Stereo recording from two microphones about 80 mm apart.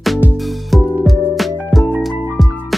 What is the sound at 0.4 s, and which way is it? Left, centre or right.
Music, centre.